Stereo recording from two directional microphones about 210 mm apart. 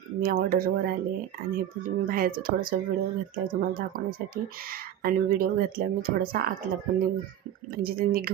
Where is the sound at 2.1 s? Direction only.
45° right (ahead or behind).